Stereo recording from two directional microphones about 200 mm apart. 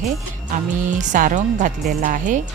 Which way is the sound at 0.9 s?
40° right (ahead or behind).